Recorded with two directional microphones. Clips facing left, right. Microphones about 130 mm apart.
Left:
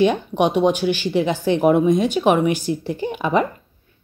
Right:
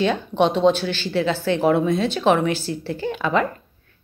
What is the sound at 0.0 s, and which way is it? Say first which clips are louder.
Speech: left 2 dB; 15° left (ahead or behind).